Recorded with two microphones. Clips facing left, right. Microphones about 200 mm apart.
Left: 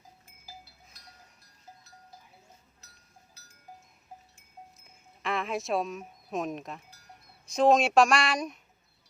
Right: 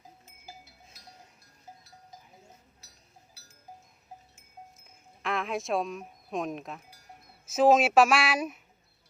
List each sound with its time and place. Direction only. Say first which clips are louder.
0.3 s music: left 1 dB; 25° right (ahead or behind)
5.2 s speech: even; centre (ahead or behind)